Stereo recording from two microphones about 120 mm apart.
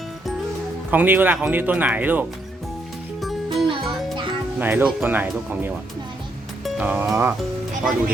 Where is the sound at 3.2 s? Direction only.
Centre (ahead or behind).